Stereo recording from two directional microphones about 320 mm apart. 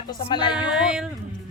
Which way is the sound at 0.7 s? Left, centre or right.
Centre.